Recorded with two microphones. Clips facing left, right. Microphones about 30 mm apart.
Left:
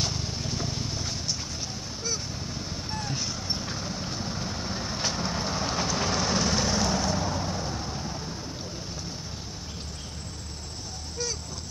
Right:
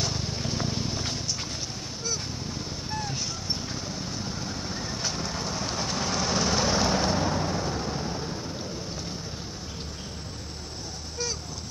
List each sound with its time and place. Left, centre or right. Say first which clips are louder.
0.1 s vehicle: right 1 dB; centre
2.9 s vehicle: even; centre; by 8.1 s right